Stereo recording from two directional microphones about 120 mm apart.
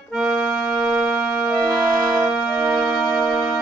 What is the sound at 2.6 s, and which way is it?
Music, 10° right (ahead or behind).